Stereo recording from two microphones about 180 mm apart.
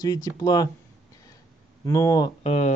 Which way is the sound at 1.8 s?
20° left (ahead or behind).